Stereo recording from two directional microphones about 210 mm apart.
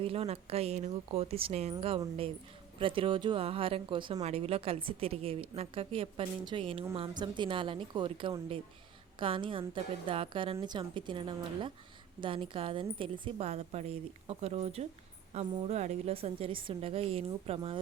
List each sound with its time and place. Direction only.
0.0 s a woman's voice: 25° right (ahead or behind)